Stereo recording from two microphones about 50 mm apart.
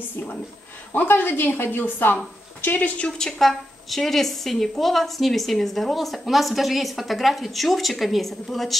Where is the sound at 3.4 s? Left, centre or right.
Centre.